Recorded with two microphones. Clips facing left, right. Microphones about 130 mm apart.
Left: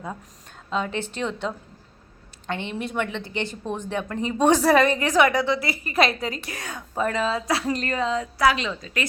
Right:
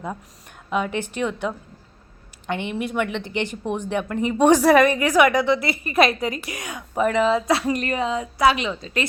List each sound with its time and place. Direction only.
0.7 s a woman's voice: 15° right (ahead or behind)